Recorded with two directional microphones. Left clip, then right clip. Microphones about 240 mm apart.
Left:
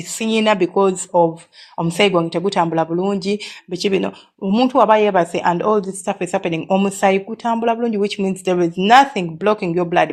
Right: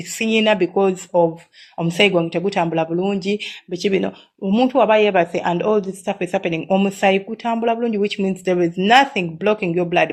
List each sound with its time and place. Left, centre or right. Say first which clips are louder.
0.2 s speech: even; left